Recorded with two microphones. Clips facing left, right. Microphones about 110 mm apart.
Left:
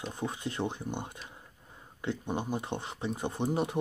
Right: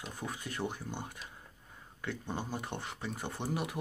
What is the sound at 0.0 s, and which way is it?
Speech, 20° left (ahead or behind).